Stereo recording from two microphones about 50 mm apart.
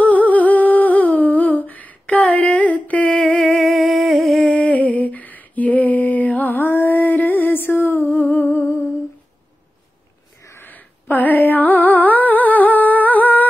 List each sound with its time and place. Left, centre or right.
0.0 s humming: left
3.1 s a sound: centre
3.4 s humming: centre
4.4 s music: centre
4.6 s lullaby: left
8.1 s humming: left
10.6 s music: left